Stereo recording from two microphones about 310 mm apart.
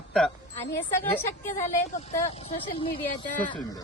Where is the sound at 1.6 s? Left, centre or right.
Left.